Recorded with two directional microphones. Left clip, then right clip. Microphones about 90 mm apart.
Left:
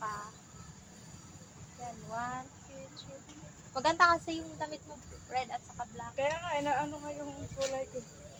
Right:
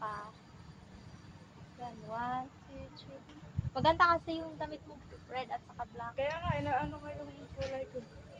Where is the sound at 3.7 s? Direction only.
25° right (ahead or behind); by 7.1 s 5° right (ahead or behind).